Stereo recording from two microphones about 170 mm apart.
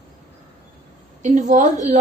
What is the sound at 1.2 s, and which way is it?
Speech, 45° right (ahead or behind).